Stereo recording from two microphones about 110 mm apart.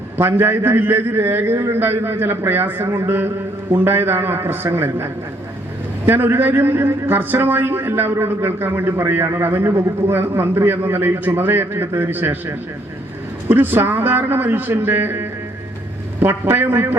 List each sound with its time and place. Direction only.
0.2 s a man's voice: 20° right (ahead or behind)
6.1 s a man's voice: 20° right (ahead or behind)